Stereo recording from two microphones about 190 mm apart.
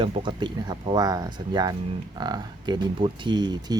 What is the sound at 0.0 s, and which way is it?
Speech, 25° right (ahead or behind).